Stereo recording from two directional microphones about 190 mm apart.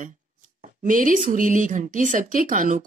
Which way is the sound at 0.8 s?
45° right (ahead or behind).